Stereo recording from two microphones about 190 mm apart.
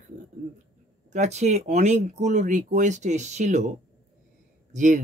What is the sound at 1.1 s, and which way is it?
Speech, 35° right (ahead or behind).